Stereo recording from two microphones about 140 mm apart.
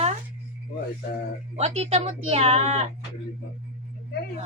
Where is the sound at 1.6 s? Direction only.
50° right (ahead or behind).